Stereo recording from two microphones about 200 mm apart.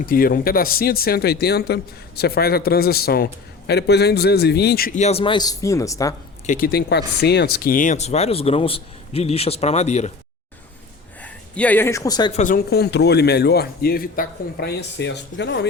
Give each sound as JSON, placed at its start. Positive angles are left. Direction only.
{"t": 0.0, "sound": "speech", "side_deg": 45}
{"t": 6.4, "sound": "speech", "side_deg": 40}
{"t": 11.2, "sound": "speech", "side_deg": 5}
{"t": 12.3, "sound": "a man's voice", "side_deg": 40}